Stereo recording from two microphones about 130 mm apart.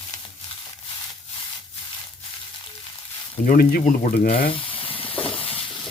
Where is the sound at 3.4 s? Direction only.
85° left.